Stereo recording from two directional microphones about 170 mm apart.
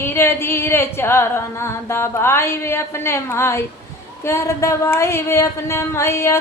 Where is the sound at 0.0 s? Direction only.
15° left (ahead or behind).